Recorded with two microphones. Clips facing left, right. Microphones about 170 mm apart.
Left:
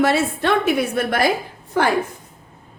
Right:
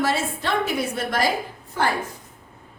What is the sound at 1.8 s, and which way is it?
Speech, 80° left.